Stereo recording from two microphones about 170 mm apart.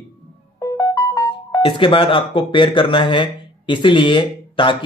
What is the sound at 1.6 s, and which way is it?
Speech, 30° left (ahead or behind).